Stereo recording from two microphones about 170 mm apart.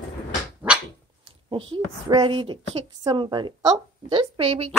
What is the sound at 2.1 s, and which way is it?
A woman's voice, 30° right (ahead or behind).